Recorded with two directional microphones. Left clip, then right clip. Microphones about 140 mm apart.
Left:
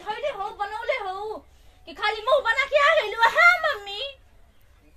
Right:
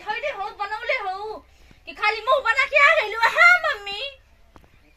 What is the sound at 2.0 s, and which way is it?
A woman's voice, 30° left (ahead or behind).